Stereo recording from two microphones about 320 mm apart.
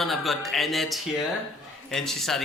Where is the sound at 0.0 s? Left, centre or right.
Centre.